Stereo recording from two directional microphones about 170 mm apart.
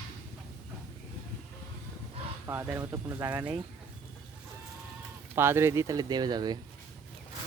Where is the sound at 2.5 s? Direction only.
15° right (ahead or behind).